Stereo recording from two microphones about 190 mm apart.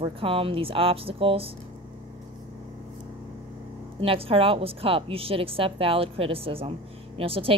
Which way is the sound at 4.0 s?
30° right (ahead or behind).